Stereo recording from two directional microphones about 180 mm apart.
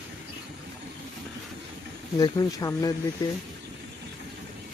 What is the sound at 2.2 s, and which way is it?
Speech, 20° left (ahead or behind).